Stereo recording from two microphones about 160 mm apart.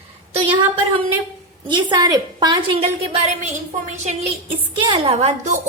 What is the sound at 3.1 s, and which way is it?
A woman's voice, 45° right (ahead or behind).